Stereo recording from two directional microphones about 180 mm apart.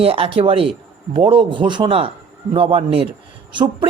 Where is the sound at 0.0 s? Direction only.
30° right (ahead or behind).